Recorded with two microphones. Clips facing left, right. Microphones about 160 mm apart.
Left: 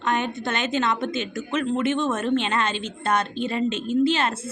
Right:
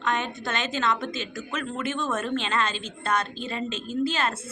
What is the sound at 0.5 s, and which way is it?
Speech, 30° right (ahead or behind).